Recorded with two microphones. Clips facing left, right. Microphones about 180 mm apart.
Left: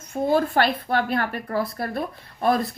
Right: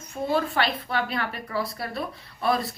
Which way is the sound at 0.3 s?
50° left (ahead or behind).